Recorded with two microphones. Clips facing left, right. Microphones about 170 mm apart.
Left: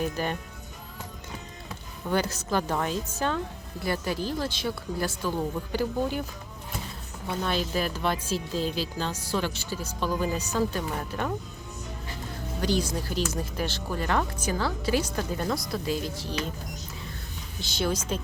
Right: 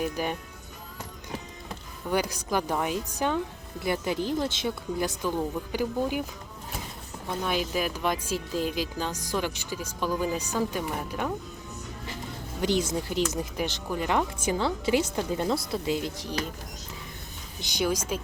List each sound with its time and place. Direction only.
0.0 s speech: 10° right (ahead or behind)
2.0 s speech: 10° right (ahead or behind)
7.4 s speech: 10° right (ahead or behind)
12.6 s speech: 20° right (ahead or behind)
17.6 s speech: 15° right (ahead or behind)